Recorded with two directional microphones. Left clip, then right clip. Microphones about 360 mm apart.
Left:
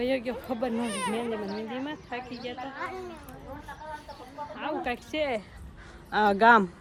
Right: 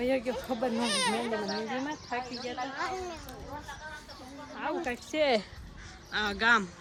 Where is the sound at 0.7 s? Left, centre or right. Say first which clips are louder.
Right 2 dB; right.